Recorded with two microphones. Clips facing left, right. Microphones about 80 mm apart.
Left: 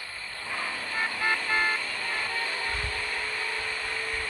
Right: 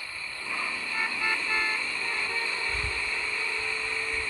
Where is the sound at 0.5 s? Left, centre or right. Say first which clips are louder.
Left 1 dB; left.